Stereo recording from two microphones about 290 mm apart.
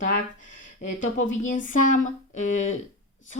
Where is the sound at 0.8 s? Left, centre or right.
Left.